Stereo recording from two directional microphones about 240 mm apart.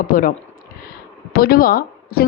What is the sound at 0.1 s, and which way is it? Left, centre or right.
A woman's voice, left.